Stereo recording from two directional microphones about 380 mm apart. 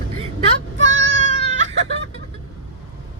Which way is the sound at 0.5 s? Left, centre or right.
Right.